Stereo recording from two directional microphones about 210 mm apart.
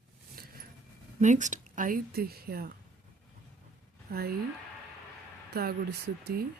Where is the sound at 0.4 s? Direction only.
45° right (ahead or behind).